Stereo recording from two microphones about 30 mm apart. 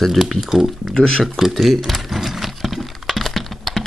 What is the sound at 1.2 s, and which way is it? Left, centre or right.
Speech, centre.